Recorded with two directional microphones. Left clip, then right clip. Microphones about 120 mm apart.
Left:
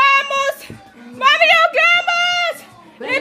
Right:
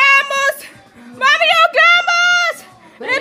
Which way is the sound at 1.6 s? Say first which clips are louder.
Right 3 dB; 25° right (ahead or behind).